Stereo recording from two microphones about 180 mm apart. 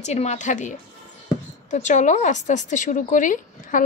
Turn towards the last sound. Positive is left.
turn(degrees=45)  # may be behind; listen again after turning